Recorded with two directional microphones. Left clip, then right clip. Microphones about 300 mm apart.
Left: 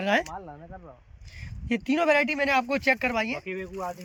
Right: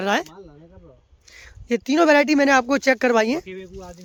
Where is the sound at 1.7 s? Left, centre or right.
Centre.